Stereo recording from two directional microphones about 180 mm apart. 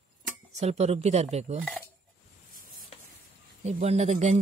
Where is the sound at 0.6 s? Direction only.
35° right (ahead or behind).